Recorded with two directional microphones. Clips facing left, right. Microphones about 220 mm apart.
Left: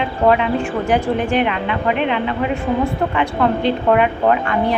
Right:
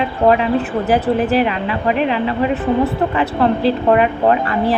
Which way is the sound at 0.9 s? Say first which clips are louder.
Right 3 dB; 5° right (ahead or behind).